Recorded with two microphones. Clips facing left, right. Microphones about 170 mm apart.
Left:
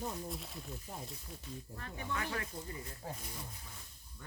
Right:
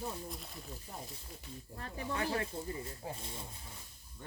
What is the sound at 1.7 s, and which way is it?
Speech, 35° right (ahead or behind).